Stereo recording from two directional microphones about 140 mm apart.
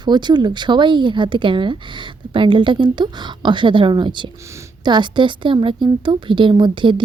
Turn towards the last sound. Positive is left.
turn(degrees=-35)  # may be behind; listen again after turning